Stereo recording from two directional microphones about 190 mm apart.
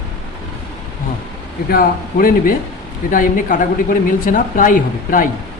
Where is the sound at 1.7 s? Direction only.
50° left (ahead or behind).